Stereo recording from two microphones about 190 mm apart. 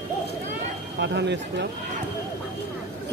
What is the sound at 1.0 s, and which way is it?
Speech, 65° right (ahead or behind).